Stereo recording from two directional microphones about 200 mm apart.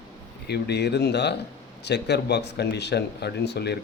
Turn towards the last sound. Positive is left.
turn(degrees=55)  # may be behind; listen again after turning